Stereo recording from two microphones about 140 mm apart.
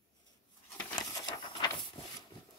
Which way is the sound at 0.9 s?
30° left (ahead or behind).